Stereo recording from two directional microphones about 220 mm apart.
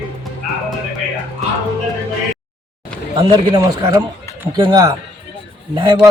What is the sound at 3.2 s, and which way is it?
A man's voice, 15° right (ahead or behind).